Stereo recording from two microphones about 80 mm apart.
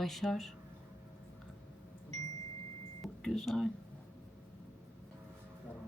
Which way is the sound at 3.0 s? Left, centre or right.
Centre.